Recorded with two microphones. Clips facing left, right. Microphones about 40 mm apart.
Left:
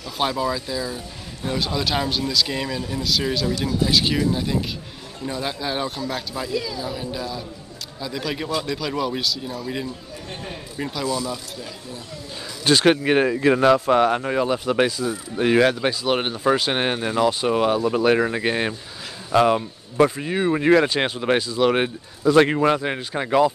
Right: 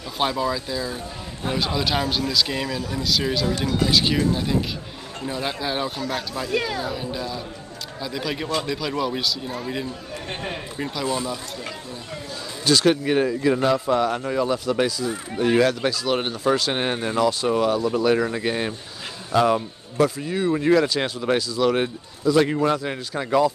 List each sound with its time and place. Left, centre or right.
0.2 s speech: centre
3.4 s speech: right
3.9 s speech: centre
6.5 s speech: right
6.9 s speech: centre
11.1 s speech: right
12.6 s speech: left
14.0 s speech: left
15.5 s speech: left
22.6 s speech: left